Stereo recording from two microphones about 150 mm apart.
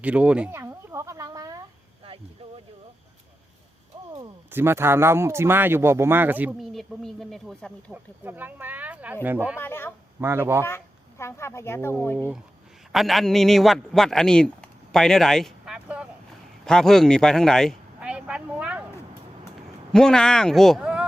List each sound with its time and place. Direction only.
0.0 s a sound: 10° right (ahead or behind)
4.5 s speech: 15° right (ahead or behind)
6.6 s speech: centre (ahead or behind)
8.2 s speech: 10° right (ahead or behind)
9.6 s speech: 15° left (ahead or behind)
10.2 s speech: 15° right (ahead or behind)
10.6 s speech: 15° left (ahead or behind)
12.9 s a man's voice: centre (ahead or behind)
18.0 s a sound: 5° right (ahead or behind)
19.9 s speech: 5° left (ahead or behind)